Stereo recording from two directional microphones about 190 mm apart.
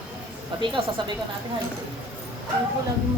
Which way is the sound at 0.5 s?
25° right (ahead or behind).